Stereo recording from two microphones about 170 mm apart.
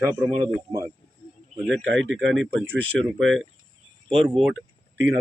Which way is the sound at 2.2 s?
5° right (ahead or behind).